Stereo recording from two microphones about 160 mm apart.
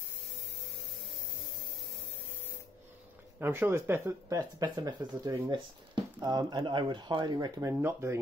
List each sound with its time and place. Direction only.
3.3 s speech: 15° right (ahead or behind)